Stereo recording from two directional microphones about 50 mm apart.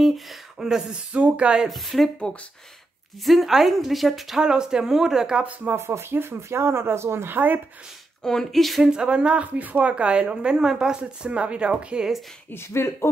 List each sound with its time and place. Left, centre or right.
0.0 s speech: centre
1.1 s speech: right
1.7 s a woman's voice: centre
3.3 s a woman's voice: centre
4.4 s speech: centre
5.4 s speech: right
5.8 s speech: right
7.2 s speech: right
8.2 s a woman's voice: centre
8.8 s speech: centre
12.6 s speech: left